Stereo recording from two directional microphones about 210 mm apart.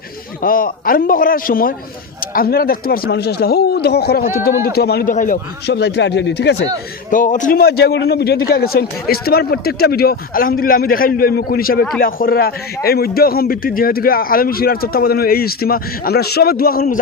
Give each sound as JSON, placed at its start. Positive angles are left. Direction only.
{"t": 0.4, "sound": "a man's voice", "side_deg": 40}
{"t": 7.1, "sound": "a man's voice", "side_deg": 40}